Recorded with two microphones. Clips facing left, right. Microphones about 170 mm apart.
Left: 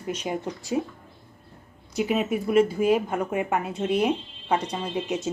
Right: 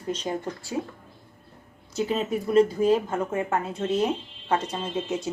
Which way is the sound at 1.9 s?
15° left (ahead or behind).